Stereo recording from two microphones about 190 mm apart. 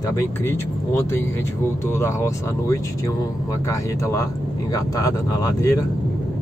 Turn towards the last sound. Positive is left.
turn(degrees=20)  # may be behind; listen again after turning